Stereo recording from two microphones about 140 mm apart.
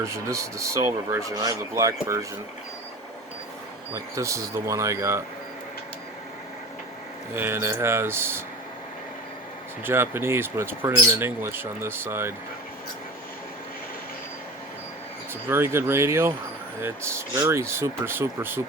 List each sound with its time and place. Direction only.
0.0 s speech: 20° right (ahead or behind)
3.9 s speech: 20° right (ahead or behind)
7.3 s speech: 15° right (ahead or behind)
9.8 s speech: 15° right (ahead or behind)
15.3 s speech: 15° right (ahead or behind)